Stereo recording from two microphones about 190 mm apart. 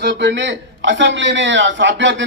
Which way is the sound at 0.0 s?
65° right (ahead or behind).